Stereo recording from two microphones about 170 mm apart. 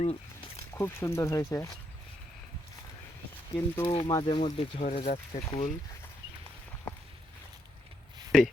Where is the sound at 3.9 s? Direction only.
30° left (ahead or behind).